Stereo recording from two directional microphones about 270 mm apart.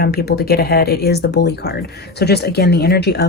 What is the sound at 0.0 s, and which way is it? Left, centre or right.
Speech, left.